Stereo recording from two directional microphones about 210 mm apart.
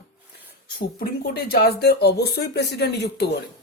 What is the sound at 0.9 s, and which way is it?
Speech, 50° left (ahead or behind).